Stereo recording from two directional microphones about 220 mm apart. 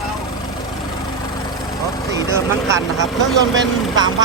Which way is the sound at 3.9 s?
20° right (ahead or behind).